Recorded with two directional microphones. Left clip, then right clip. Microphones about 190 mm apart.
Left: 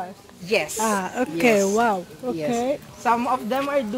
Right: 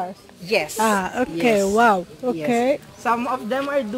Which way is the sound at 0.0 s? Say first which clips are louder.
Right 4 dB; 40° right (ahead or behind).